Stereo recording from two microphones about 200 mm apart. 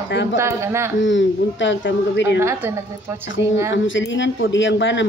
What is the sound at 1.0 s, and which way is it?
Speech, 65° left (ahead or behind).